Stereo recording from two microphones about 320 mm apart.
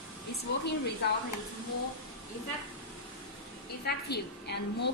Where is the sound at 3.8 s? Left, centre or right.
Left.